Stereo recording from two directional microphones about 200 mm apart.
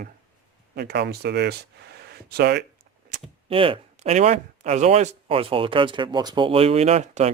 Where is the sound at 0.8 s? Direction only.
55° right (ahead or behind).